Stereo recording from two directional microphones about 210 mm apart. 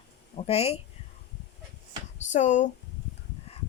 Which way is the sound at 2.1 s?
35° left (ahead or behind).